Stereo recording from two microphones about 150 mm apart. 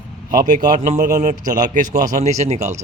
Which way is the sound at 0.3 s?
65° right (ahead or behind).